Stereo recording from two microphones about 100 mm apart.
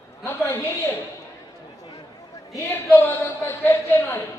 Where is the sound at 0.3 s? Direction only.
25° left (ahead or behind).